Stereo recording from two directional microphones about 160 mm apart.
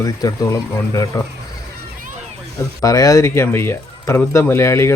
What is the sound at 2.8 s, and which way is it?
Speech, 20° left (ahead or behind).